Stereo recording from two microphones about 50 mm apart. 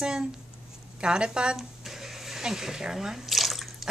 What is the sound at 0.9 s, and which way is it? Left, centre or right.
Speech, centre.